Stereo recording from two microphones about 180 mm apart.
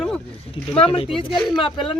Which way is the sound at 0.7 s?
30° left (ahead or behind).